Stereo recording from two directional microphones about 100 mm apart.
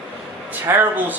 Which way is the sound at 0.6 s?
20° right (ahead or behind).